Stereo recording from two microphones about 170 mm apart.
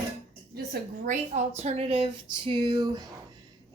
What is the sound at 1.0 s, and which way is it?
Speech, 45° right (ahead or behind).